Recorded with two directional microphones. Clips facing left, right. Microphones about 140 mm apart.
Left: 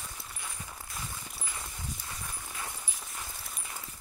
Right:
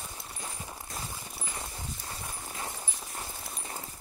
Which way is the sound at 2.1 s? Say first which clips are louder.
Right 2 dB; 30° right (ahead or behind).